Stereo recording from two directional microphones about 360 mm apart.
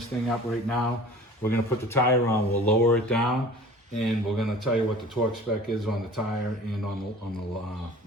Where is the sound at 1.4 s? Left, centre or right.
Centre.